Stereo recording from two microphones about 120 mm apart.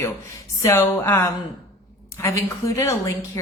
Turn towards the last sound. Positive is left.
turn(degrees=25)  # may be behind; listen again after turning